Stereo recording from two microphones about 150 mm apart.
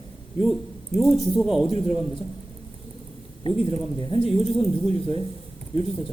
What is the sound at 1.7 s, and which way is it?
Speech, 40° left (ahead or behind).